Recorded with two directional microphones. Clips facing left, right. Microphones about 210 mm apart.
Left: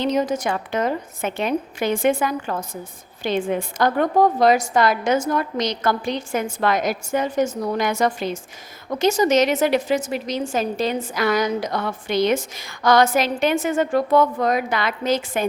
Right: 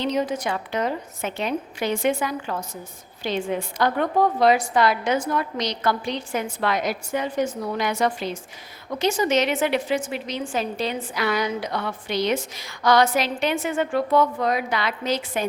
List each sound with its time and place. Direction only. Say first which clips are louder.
0.0 s a woman's voice: left 3 dB; 45° left (ahead or behind)